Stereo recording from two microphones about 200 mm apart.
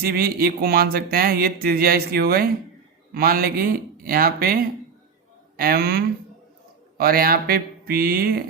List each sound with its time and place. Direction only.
0.0 s speech: 50° right (ahead or behind)